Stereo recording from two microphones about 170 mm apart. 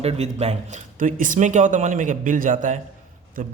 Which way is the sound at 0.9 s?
50° right (ahead or behind).